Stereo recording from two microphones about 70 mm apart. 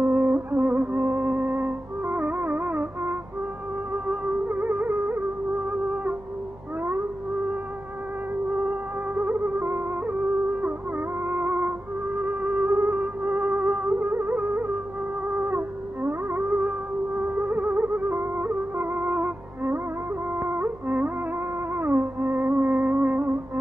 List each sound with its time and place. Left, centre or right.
0.0 s music: right
3.9 s music: right
8.5 s music: right